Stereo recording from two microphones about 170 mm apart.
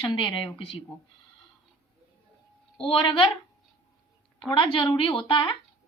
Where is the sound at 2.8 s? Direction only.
30° left (ahead or behind).